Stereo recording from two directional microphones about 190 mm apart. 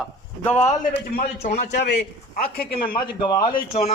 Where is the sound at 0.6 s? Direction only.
50° left (ahead or behind).